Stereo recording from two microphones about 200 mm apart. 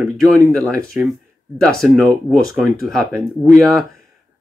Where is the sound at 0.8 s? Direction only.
Centre (ahead or behind).